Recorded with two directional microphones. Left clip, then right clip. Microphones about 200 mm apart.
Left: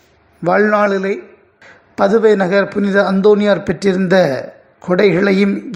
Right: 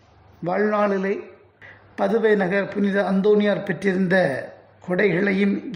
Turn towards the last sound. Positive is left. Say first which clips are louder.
# left 8 dB
turn(degrees=15)  # may be behind; listen again after turning